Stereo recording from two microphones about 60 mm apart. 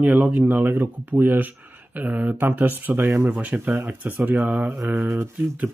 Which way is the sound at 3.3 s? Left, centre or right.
Right.